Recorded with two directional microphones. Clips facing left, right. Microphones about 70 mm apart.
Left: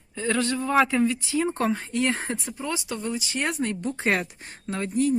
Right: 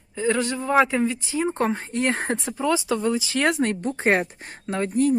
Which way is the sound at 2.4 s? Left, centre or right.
Right.